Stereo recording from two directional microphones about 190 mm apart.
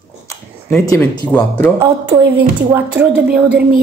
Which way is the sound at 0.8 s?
20° left (ahead or behind).